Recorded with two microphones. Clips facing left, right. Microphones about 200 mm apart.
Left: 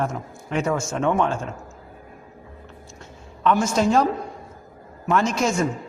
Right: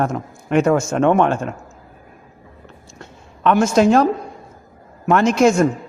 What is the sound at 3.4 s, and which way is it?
Speech, 70° right (ahead or behind).